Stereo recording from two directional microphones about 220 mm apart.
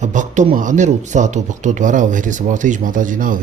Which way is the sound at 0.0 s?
35° right (ahead or behind).